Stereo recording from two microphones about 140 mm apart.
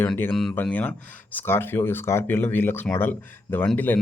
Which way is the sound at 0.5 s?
10° left (ahead or behind).